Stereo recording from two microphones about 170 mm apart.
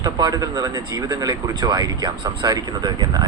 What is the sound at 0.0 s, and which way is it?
Speech, 20° right (ahead or behind).